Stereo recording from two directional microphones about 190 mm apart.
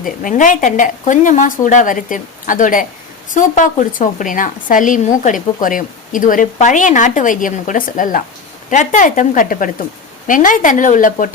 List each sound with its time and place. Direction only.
0.0 s a woman's voice: 45° left (ahead or behind)